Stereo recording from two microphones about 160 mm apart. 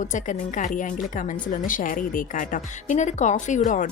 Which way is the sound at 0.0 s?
50° left (ahead or behind).